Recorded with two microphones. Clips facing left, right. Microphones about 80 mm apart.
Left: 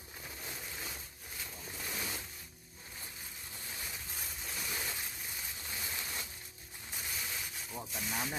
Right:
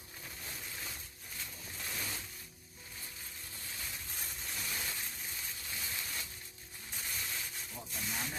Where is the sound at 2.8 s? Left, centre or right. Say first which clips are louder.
Left 1 dB; left.